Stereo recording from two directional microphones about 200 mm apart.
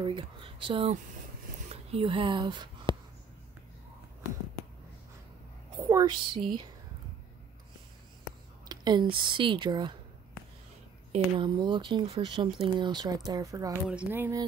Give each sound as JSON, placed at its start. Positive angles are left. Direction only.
{"t": 0.0, "sound": "speech", "side_deg": -25}
{"t": 5.9, "sound": "speech", "side_deg": -20}
{"t": 8.6, "sound": "speech", "side_deg": -20}
{"t": 11.1, "sound": "speech", "side_deg": -25}
{"t": 13.8, "sound": "a sound", "side_deg": -10}